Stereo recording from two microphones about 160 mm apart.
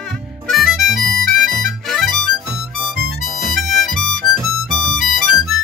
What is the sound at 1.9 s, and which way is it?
Music, centre (ahead or behind).